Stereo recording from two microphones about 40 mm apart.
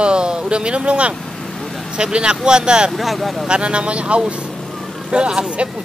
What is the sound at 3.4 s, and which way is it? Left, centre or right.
Speech, right.